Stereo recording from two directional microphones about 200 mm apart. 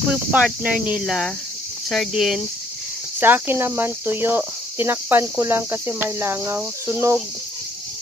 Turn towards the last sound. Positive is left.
turn(degrees=-15)  # may be behind; listen again after turning